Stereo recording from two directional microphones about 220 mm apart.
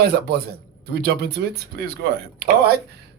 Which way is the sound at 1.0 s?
45° right (ahead or behind).